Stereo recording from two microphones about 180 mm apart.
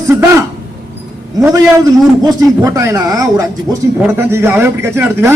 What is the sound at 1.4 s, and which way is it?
A man's voice, 20° right (ahead or behind).